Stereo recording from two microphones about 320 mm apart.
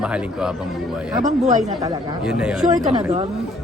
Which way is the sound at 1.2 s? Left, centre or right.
Right.